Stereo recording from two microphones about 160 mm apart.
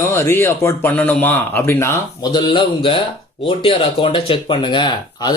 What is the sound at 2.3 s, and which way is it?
A man's voice, 30° left (ahead or behind).